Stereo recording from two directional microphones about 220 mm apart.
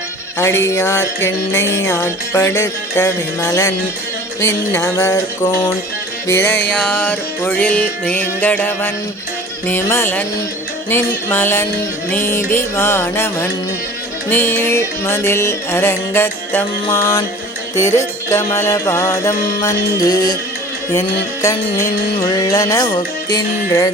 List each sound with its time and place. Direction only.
0.3 s music: 10° left (ahead or behind)
22.3 s music: 15° left (ahead or behind)